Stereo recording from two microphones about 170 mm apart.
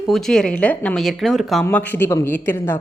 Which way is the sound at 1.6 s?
15° left (ahead or behind).